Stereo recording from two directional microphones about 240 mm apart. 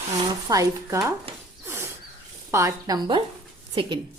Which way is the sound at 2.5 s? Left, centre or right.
Centre.